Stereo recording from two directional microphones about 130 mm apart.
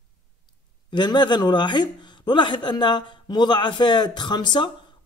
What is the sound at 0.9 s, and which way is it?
A man's voice, 35° left (ahead or behind).